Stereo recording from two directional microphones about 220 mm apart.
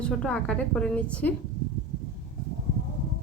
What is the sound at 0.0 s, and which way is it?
A woman's voice, 5° left (ahead or behind).